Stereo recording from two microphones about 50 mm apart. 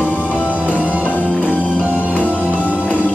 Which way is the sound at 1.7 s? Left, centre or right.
Right.